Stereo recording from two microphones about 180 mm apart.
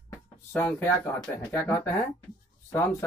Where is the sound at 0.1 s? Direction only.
10° left (ahead or behind).